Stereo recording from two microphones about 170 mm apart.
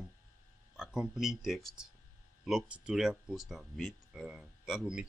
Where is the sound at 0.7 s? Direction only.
5° right (ahead or behind).